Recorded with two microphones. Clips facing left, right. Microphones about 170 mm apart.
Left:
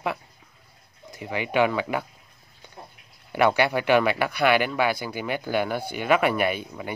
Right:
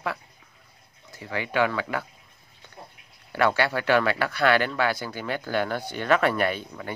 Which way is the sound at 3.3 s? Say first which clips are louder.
Left 2 dB; 15° left (ahead or behind).